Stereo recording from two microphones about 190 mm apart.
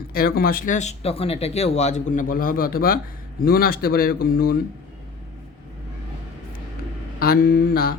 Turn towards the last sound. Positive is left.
turn(degrees=50)  # may be behind; listen again after turning